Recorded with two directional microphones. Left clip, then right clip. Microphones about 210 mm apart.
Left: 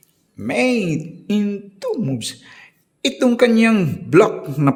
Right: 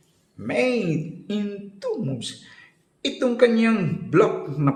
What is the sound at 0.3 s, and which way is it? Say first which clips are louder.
A man's voice: left 4 dB; 35° left (ahead or behind).